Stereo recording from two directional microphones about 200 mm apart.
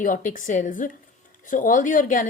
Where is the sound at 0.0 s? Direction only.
40° left (ahead or behind).